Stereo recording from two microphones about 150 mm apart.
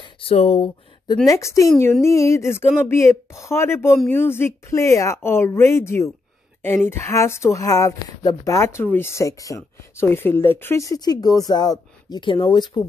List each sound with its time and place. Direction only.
0.0 s speech: 40° left (ahead or behind)
1.0 s speech: 25° left (ahead or behind)